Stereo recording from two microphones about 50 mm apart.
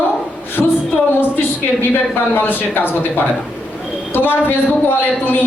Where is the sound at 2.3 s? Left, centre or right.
Left.